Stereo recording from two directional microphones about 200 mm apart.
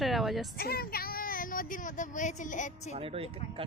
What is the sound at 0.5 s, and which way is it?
Speech, 50° left (ahead or behind).